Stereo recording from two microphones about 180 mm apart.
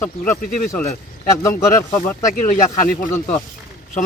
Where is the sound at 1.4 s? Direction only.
15° left (ahead or behind).